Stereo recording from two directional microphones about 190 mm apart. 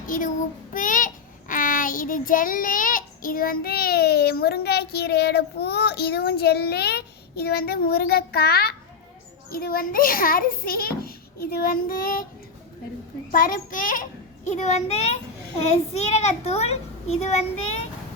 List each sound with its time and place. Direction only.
0.7 s child singing: 45° left (ahead or behind)
9.5 s a child's voice: 50° left (ahead or behind)
13.3 s a child's voice: 45° left (ahead or behind)